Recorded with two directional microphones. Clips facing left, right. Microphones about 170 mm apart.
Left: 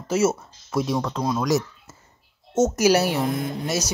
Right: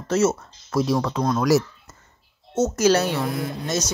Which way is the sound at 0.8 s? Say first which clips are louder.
Right 4 dB; centre (ahead or behind).